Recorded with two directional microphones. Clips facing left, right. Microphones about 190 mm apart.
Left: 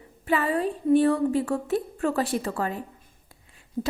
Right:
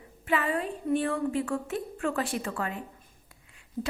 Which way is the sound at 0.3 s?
35° left (ahead or behind).